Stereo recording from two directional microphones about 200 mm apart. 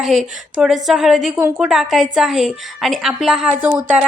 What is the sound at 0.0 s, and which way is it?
A woman's voice, centre (ahead or behind).